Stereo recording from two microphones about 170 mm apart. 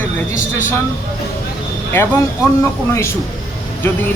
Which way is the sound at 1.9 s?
15° left (ahead or behind).